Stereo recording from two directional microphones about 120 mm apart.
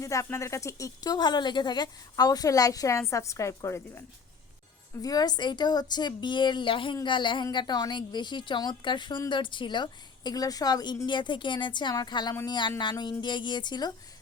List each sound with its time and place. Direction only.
0.0 s speech: 25° left (ahead or behind)
5.0 s a woman's voice: 35° left (ahead or behind)